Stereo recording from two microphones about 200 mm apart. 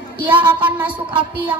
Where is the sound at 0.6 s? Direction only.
10° right (ahead or behind).